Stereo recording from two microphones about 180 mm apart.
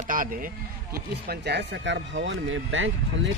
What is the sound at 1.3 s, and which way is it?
Speech, 65° right (ahead or behind).